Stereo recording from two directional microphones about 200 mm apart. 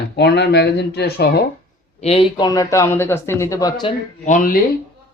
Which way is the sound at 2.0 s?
30° left (ahead or behind).